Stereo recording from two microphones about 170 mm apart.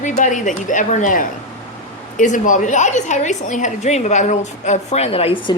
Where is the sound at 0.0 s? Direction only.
45° left (ahead or behind).